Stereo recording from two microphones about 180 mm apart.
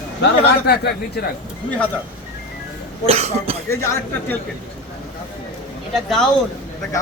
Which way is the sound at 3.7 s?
15° left (ahead or behind).